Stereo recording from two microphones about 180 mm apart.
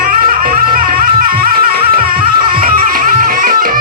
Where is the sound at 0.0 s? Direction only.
50° right (ahead or behind).